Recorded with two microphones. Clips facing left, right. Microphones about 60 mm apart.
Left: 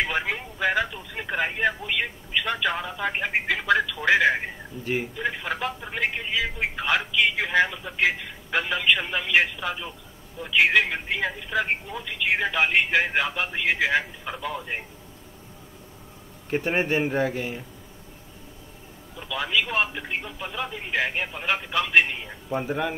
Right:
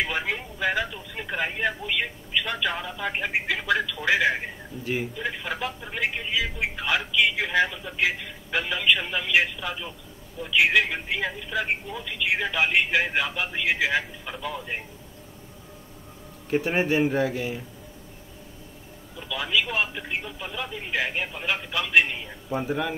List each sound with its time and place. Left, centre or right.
0.1 s speech: centre
5.9 s speech: centre
16.4 s speech: centre
19.1 s speech: centre